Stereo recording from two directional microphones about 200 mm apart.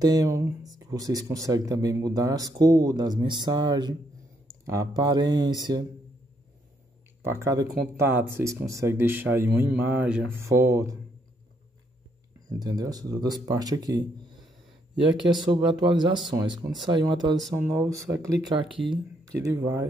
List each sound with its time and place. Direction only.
0.0 s speech: 20° right (ahead or behind)
7.2 s speech: 15° right (ahead or behind)
12.4 s speech: 20° right (ahead or behind)
15.8 s speech: 20° right (ahead or behind)
19.3 s speech: 15° right (ahead or behind)